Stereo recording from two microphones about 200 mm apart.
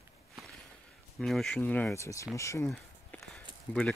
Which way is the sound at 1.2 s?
Centre (ahead or behind).